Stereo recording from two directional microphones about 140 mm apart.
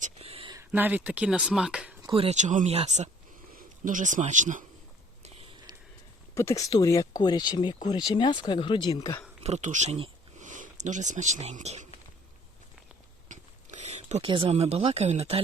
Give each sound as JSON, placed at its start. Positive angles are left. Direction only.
{"t": 0.2, "sound": "a sound", "side_deg": -45}
{"t": 0.7, "sound": "speech", "side_deg": -10}
{"t": 2.0, "sound": "speech", "side_deg": -45}
{"t": 3.8, "sound": "speech", "side_deg": -65}
{"t": 5.2, "sound": "a sound", "side_deg": -50}
{"t": 5.7, "sound": "sniff", "side_deg": -30}
{"t": 6.3, "sound": "speech", "side_deg": 20}
{"t": 9.4, "sound": "speech", "side_deg": -55}
{"t": 13.2, "sound": "a sound", "side_deg": -60}
{"t": 14.3, "sound": "speech", "side_deg": -40}